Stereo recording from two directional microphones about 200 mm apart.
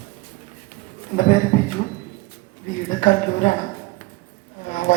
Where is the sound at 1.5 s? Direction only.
45° left (ahead or behind).